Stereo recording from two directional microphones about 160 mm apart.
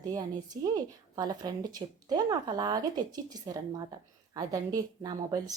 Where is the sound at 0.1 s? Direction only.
25° right (ahead or behind).